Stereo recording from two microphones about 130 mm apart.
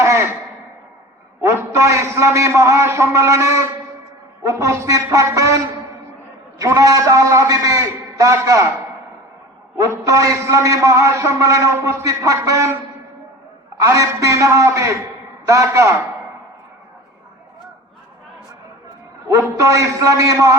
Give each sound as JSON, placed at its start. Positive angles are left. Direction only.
{"t": 0.0, "sound": "a sound", "side_deg": -20}
{"t": 1.4, "sound": "a man's voice", "side_deg": -20}
{"t": 6.6, "sound": "a man's voice", "side_deg": -25}
{"t": 9.7, "sound": "a man's voice", "side_deg": -20}
{"t": 13.7, "sound": "a man's voice", "side_deg": -25}
{"t": 19.3, "sound": "a man's voice", "side_deg": -25}